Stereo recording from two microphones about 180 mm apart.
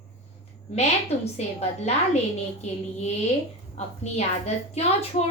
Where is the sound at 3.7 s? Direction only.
35° left (ahead or behind).